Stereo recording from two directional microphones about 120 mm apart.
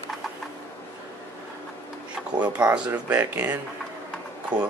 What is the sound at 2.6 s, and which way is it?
Speech, 10° right (ahead or behind).